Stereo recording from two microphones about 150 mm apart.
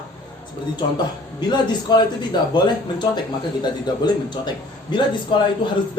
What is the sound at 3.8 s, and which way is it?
A man's voice, 30° left (ahead or behind).